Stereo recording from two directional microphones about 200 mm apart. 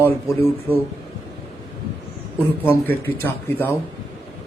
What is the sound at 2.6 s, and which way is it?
A man's voice, 10° left (ahead or behind).